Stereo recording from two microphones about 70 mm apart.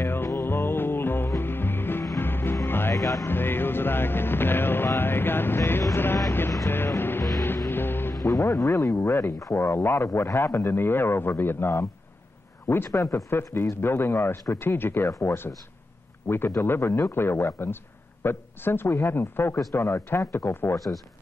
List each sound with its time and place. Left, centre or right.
0.0 s music: left
2.9 s music: left
3.3 s music: left
7.0 s music: left
8.2 s speech: left
9.5 s music: left
15.0 s speech: left
16.3 s music: left
18.2 s speech: left
19.1 s music: left